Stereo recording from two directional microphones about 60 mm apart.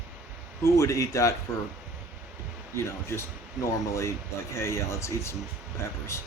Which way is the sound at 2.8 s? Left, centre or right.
Left.